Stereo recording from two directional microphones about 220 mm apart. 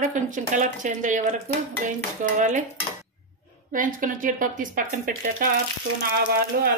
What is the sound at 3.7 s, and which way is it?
Speech, 35° right (ahead or behind).